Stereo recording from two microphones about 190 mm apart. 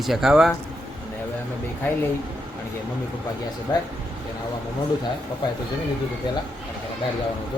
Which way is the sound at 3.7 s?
15° left (ahead or behind).